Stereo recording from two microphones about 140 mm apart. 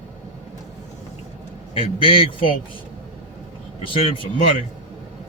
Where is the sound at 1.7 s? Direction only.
40° left (ahead or behind).